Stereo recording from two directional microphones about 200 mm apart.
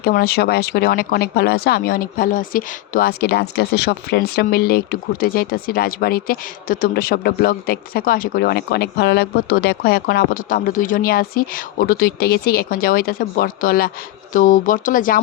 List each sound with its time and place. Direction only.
0.0 s speech: 50° left (ahead or behind)